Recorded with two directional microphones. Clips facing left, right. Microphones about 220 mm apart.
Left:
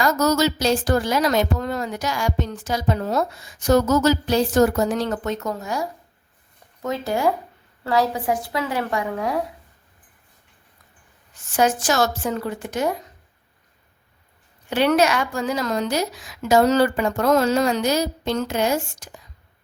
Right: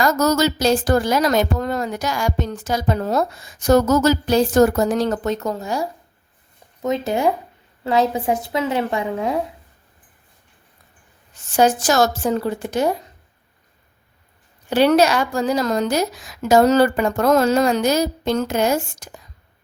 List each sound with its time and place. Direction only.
0.0 s a woman's voice: 45° right (ahead or behind); by 5.9 s 30° right (ahead or behind)
6.8 s a woman's voice: 20° right (ahead or behind)
11.5 s a woman's voice: 35° right (ahead or behind)
14.7 s a woman's voice: 35° right (ahead or behind)